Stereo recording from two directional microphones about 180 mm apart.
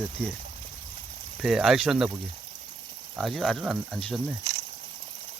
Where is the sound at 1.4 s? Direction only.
Centre (ahead or behind).